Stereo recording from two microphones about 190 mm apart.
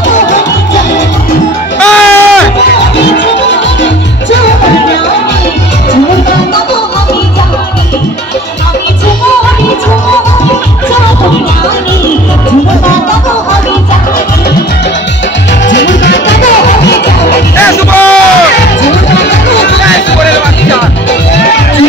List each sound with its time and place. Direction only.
1.8 s music: 5° left (ahead or behind)
15.7 s music: 70° left (ahead or behind)
17.6 s music: 10° left (ahead or behind)
18.9 s music: 70° left (ahead or behind)